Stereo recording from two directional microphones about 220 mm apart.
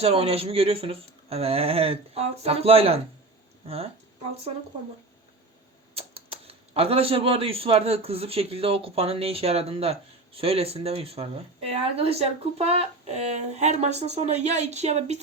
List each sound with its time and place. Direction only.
0.0 s speech: 25° right (ahead or behind)
5.9 s typewriter: 25° right (ahead or behind)
6.3 s speech: 25° right (ahead or behind)